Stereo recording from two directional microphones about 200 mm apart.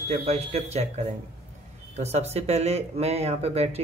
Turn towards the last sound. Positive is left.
turn(degrees=-30)  # may be behind; listen again after turning